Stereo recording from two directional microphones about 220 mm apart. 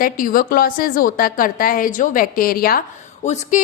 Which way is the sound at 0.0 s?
40° left (ahead or behind).